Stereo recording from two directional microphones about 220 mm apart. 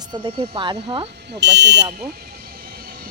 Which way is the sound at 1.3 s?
50° right (ahead or behind).